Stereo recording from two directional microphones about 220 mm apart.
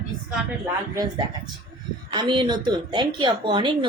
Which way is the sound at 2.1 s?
20° right (ahead or behind).